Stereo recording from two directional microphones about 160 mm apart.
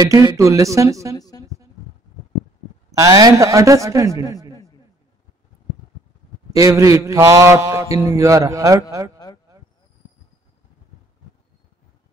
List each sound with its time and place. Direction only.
0.0 s a man's voice: 25° right (ahead or behind)
1.1 s a woman's voice: 25° left (ahead or behind)
1.4 s a sound: 20° right (ahead or behind)
2.9 s a man's voice: 20° right (ahead or behind)
6.5 s a man's voice: 20° right (ahead or behind)